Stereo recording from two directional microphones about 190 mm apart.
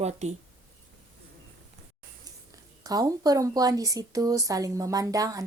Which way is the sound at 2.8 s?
20° right (ahead or behind).